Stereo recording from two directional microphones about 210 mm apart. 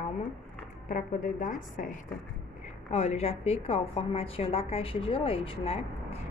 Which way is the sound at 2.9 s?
30° left (ahead or behind).